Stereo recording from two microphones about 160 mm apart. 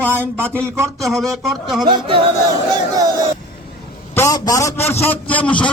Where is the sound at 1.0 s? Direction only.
Centre (ahead or behind).